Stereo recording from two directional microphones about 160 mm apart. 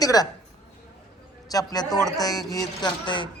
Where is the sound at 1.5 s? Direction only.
25° left (ahead or behind).